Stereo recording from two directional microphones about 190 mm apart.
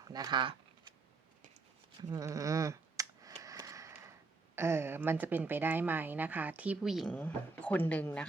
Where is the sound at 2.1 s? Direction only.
15° right (ahead or behind).